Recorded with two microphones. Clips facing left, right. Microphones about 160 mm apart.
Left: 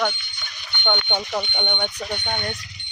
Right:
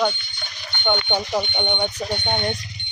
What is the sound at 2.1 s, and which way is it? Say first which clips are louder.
Speech: right 4 dB; 30° right (ahead or behind).